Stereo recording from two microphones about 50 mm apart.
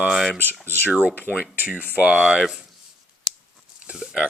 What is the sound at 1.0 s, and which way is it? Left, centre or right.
Speech, right.